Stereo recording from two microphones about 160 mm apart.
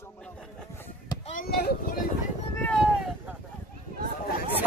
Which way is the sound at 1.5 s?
75° left (ahead or behind).